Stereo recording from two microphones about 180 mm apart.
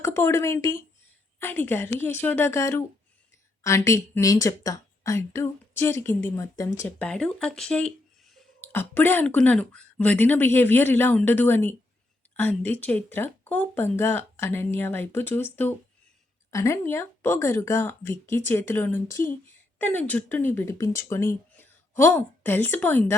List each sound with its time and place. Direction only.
0.0 s speech: 15° left (ahead or behind)
7.0 s speech: 5° left (ahead or behind)